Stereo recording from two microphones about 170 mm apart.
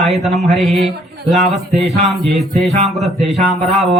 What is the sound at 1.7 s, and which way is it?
Music, 40° right (ahead or behind).